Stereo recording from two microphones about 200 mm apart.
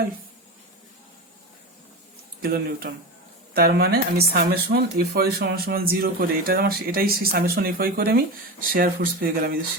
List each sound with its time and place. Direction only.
2.4 s speech: 50° right (ahead or behind)